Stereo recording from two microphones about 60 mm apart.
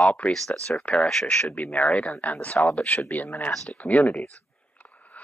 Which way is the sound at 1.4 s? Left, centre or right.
Left.